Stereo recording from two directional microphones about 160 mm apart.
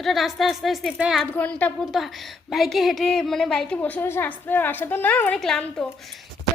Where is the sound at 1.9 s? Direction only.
Centre (ahead or behind).